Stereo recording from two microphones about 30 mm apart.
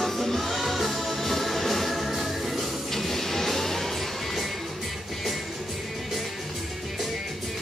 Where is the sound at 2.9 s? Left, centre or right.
Centre.